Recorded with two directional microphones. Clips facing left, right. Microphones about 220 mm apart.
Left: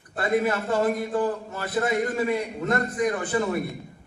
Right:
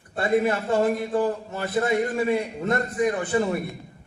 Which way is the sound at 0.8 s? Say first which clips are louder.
Right 1 dB; 25° right (ahead or behind).